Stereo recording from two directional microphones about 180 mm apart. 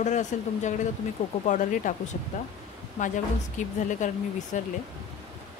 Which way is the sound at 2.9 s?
45° left (ahead or behind).